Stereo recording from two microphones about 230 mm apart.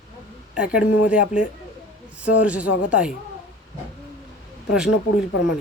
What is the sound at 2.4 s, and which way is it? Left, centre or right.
Speech, centre.